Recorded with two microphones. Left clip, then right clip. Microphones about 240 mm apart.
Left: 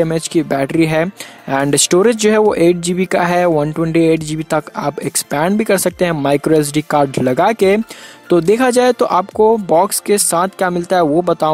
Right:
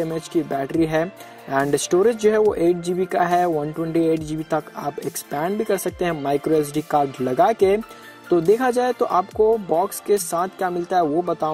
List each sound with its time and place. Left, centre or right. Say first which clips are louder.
0.0 s speech: left 8 dB; left